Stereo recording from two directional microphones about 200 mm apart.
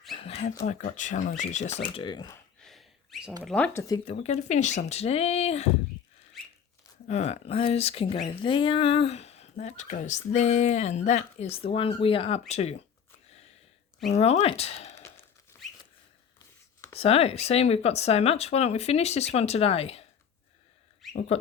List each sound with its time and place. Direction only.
0.2 s a sound: 30° left (ahead or behind)
0.7 s speech: 40° left (ahead or behind); by 2.4 s 20° left (ahead or behind)
2.6 s a sound: centre (ahead or behind)
3.4 s speech: 5° left (ahead or behind)
3.8 s speech: 20° left (ahead or behind)
4.1 s speech: 35° left (ahead or behind)
7.1 s speech: 30° left (ahead or behind)
14.1 s speech: 35° left (ahead or behind)
17.0 s speech: 30° left (ahead or behind)
21.1 s dog: 35° left (ahead or behind)